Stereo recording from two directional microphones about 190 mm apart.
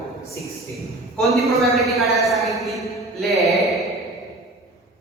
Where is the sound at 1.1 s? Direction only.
Centre (ahead or behind).